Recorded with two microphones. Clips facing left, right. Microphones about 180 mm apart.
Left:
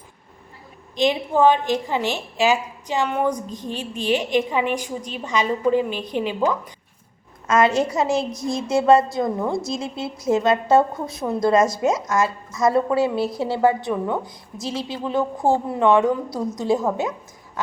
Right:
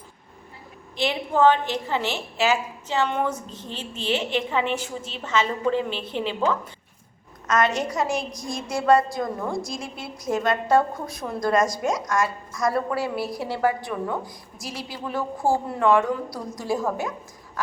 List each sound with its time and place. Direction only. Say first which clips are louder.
0.9 s a woman's voice: left 4 dB; 15° left (ahead or behind)
7.4 s a woman's voice: left 5 dB; 30° left (ahead or behind)